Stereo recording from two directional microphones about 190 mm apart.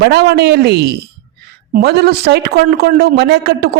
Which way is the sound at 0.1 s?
60° right (ahead or behind).